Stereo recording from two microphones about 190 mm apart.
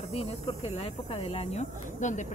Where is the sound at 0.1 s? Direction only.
30° left (ahead or behind).